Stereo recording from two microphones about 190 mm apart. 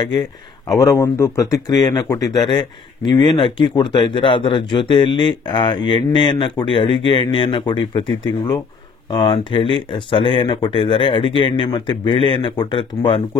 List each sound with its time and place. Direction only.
0.7 s speech: 15° left (ahead or behind)